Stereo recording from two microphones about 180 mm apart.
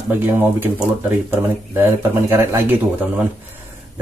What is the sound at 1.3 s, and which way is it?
Speech, 15° right (ahead or behind).